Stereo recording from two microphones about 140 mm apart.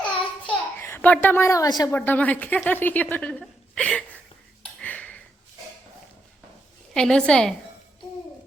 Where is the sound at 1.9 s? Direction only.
10° left (ahead or behind).